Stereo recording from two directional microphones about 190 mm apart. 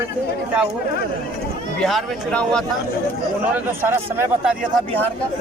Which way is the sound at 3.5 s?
10° right (ahead or behind).